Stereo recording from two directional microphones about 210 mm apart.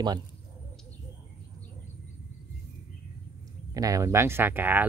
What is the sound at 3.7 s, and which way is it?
Speech, 15° right (ahead or behind).